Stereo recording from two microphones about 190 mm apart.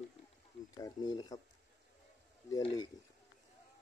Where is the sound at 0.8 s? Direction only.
20° left (ahead or behind).